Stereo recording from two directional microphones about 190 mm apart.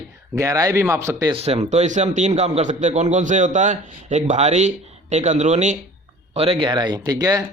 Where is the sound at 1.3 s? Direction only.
30° right (ahead or behind).